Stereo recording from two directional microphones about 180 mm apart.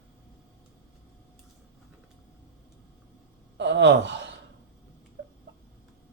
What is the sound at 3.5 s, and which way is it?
Gasp, 80° right.